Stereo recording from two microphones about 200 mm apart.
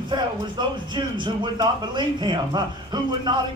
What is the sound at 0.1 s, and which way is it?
Speech, 25° right (ahead or behind).